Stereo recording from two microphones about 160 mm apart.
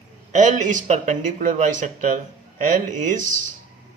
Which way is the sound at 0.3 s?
50° right (ahead or behind).